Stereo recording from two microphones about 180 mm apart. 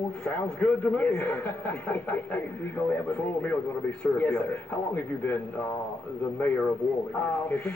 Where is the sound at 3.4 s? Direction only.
10° left (ahead or behind).